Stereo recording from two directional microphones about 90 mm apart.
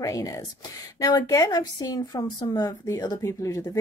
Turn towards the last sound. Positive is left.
turn(degrees=35)  # may be behind; listen again after turning